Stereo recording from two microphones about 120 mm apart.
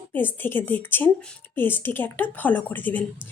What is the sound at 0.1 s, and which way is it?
A woman's voice, 15° left (ahead or behind).